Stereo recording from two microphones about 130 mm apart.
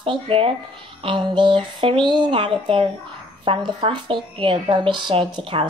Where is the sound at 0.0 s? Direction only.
45° right (ahead or behind).